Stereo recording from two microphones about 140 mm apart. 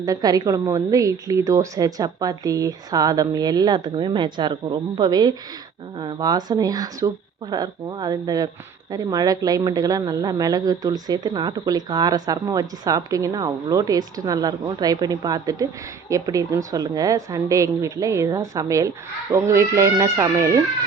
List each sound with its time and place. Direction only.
0.0 s speech: 25° right (ahead or behind)